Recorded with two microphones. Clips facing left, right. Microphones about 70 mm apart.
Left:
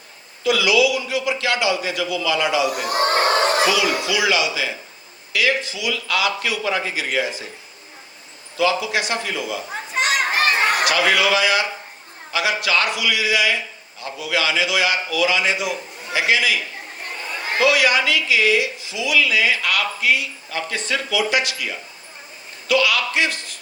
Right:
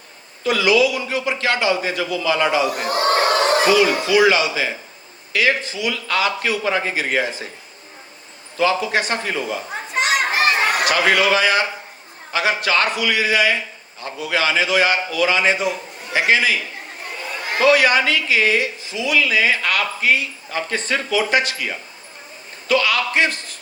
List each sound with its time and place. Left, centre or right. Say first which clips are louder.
0.4 s speech: right 1 dB; right
8.5 s speech: right 1 dB; right
9.9 s a sound: right 1 dB; centre
10.8 s speech: right 1 dB; right
17.6 s a man's voice: right 3 dB; right